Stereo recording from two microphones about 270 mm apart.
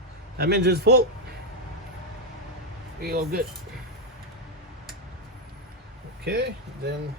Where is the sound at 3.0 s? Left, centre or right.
Right.